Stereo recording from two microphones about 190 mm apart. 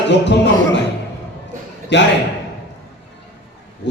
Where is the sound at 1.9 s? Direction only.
65° left (ahead or behind).